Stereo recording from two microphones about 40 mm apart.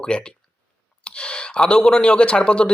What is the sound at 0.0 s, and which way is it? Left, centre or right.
Speech, left.